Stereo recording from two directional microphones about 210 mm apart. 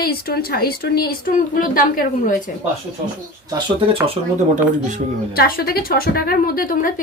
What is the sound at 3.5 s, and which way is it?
Speech, 20° right (ahead or behind).